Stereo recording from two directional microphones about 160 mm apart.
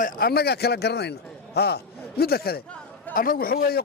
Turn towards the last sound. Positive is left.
turn(degrees=65)  # may be behind; listen again after turning